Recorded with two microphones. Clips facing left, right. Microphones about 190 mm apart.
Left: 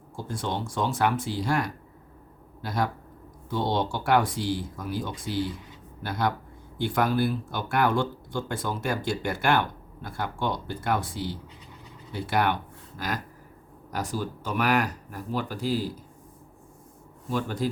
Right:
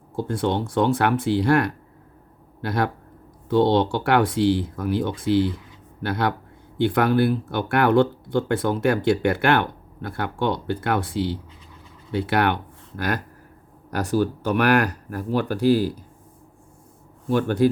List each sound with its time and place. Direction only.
0.2 s speech: 60° right (ahead or behind)
13.9 s speech: 70° right (ahead or behind)
17.2 s speech: 70° right (ahead or behind)